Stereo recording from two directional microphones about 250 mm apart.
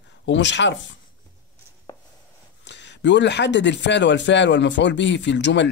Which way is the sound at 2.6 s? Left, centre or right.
Left.